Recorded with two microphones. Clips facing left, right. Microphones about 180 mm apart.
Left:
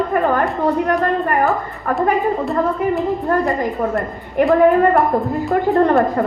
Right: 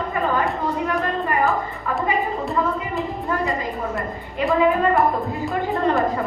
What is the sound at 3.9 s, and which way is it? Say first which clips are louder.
Speech: left 8 dB; 55° left (ahead or behind).